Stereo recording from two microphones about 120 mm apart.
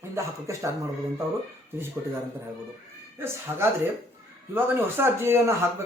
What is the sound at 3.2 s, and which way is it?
Speech, 20° right (ahead or behind).